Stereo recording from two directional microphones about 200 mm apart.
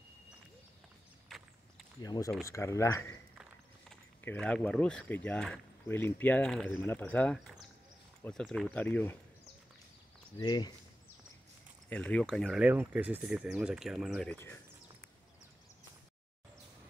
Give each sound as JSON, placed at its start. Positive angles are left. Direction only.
{"t": 2.0, "sound": "speech", "side_deg": 20}
{"t": 10.4, "sound": "speech", "side_deg": 20}
{"t": 11.9, "sound": "speech", "side_deg": 5}